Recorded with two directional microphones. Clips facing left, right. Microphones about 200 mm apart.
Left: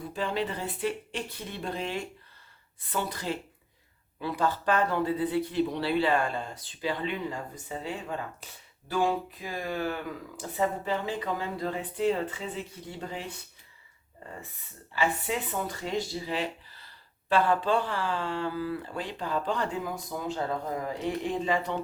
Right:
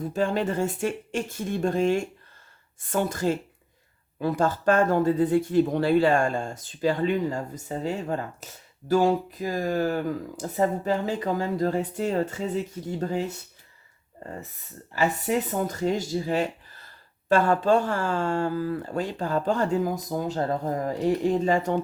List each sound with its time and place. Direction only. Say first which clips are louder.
0.1 s speech: right 5 dB; 45° right (ahead or behind)
14.9 s speech: right 5 dB; 40° right (ahead or behind)